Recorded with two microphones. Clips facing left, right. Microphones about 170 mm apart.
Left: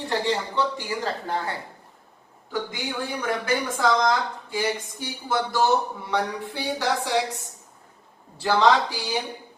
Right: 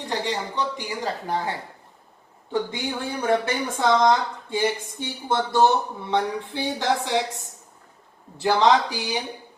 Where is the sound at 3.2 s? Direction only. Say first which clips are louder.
Right 4 dB; 25° right (ahead or behind).